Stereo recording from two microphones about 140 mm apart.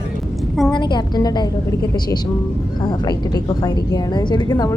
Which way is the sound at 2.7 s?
30° left (ahead or behind).